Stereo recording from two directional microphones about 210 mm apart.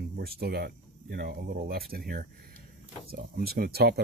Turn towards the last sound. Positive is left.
turn(degrees=-50)  # may be behind; listen again after turning